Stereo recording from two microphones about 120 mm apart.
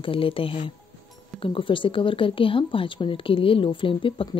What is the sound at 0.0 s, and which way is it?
Speech, 50° left (ahead or behind).